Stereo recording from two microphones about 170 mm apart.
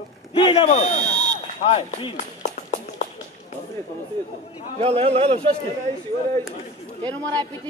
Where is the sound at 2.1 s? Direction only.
45° left (ahead or behind).